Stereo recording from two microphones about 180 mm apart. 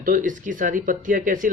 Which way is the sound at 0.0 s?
50° right (ahead or behind).